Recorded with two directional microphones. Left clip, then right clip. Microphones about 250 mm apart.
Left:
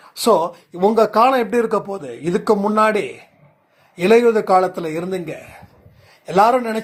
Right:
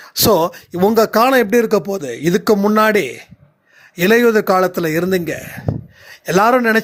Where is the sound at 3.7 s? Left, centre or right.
Right.